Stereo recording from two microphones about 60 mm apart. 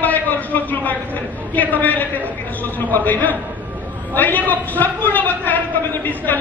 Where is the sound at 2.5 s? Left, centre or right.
Left.